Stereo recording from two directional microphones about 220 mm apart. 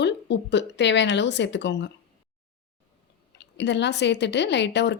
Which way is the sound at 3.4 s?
50° left (ahead or behind).